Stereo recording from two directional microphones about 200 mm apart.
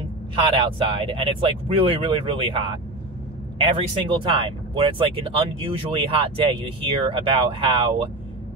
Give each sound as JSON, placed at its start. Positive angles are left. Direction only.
{"t": 0.6, "sound": "speech", "side_deg": -25}